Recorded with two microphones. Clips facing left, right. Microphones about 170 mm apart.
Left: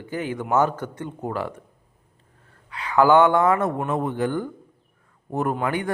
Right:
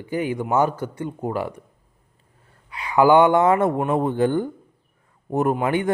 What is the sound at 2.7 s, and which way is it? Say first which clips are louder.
A man's voice: right 1 dB; 10° right (ahead or behind).